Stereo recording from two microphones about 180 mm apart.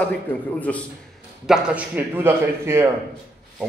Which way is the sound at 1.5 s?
5° right (ahead or behind).